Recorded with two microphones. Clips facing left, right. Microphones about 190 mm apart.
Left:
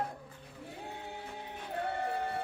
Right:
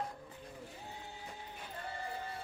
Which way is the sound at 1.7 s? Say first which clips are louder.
Left 9 dB; 65° left (ahead or behind).